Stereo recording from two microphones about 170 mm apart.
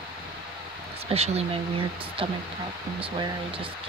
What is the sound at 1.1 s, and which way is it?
Speech, 35° right (ahead or behind).